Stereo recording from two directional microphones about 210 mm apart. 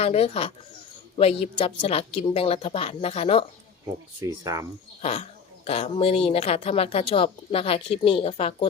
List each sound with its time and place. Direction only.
0.0 s speech: 30° left (ahead or behind)
4.2 s speech: 15° right (ahead or behind)
5.6 s speech: 30° left (ahead or behind)